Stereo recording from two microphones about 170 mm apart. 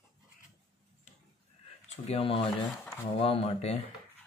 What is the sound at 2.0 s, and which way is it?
Speech, 35° left (ahead or behind).